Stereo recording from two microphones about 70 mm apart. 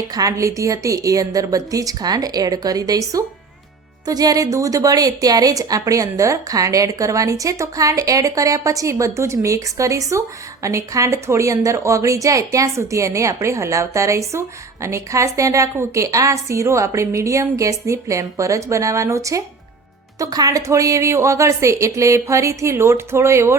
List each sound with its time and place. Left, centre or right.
0.1 s a woman's voice: right
4.0 s speech: right
20.1 s a woman's voice: right